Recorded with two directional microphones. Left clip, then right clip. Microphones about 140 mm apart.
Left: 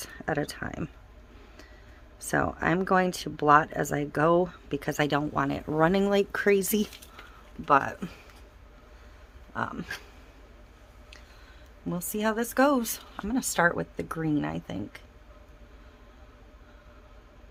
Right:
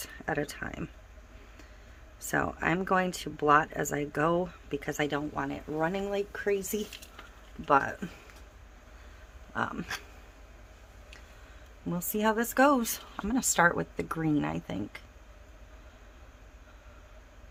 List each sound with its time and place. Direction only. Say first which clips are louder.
0.0 s speech: left 2 dB; 35° left (ahead or behind)
2.2 s speech: left 3 dB; 30° left (ahead or behind); by 6.8 s 90° left
7.6 s a man's voice: left 2 dB; 25° left (ahead or behind)
9.5 s speech: even; 15° left (ahead or behind)
11.9 s speech: even; 10° left (ahead or behind)